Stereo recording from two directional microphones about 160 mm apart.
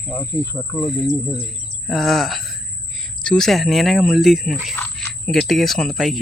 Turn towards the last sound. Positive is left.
turn(degrees=0)  # may be behind; listen again after turning